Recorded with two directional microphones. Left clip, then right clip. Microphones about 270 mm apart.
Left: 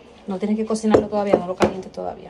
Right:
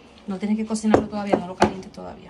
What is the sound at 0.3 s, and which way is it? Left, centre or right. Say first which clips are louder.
A woman's voice: left 4 dB; centre.